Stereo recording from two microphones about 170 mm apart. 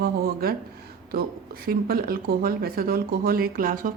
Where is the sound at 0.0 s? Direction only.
65° right (ahead or behind).